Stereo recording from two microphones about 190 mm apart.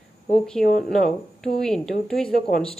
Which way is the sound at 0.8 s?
Centre (ahead or behind).